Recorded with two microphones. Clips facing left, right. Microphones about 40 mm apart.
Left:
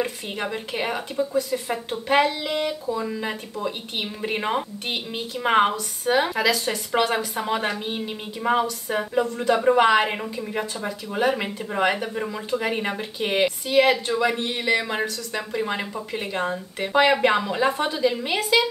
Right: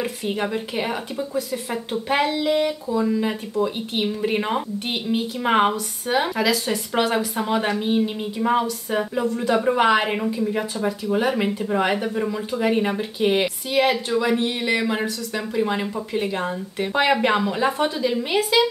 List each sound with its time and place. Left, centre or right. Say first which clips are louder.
0.0 s a woman's voice: right 2 dB; centre